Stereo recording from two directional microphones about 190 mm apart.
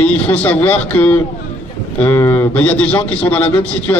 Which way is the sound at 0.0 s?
10° left (ahead or behind).